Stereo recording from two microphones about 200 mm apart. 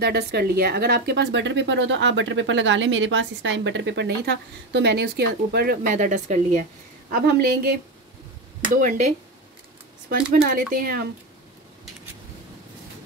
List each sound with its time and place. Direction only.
0.0 s speech: 50° right (ahead or behind); by 6.6 s 35° right (ahead or behind)
7.1 s speech: 50° right (ahead or behind)
8.7 s speech: 40° right (ahead or behind)
10.3 s speech: 45° right (ahead or behind)